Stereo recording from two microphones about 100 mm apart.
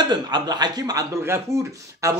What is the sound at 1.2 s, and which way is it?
Speech, 30° right (ahead or behind).